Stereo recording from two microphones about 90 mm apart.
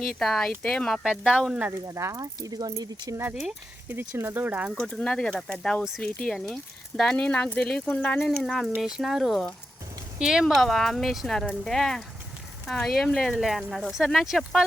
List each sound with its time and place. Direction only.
0.0 s speech: 5° left (ahead or behind)
1.0 s speech: 10° right (ahead or behind)
1.9 s speech: 35° right (ahead or behind)
3.8 s speech: 25° right (ahead or behind)
4.7 s speech: 5° left (ahead or behind)
8.4 s speech: centre (ahead or behind)